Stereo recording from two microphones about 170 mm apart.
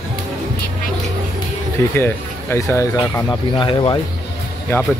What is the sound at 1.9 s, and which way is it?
Speech, 15° left (ahead or behind).